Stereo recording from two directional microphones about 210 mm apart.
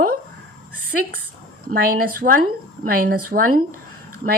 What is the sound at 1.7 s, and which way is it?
A woman's voice, 45° right (ahead or behind).